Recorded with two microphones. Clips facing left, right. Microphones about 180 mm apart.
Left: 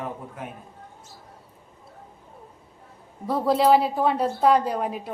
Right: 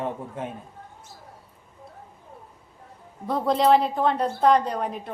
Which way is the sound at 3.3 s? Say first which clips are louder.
Left 1 dB; 5° left (ahead or behind).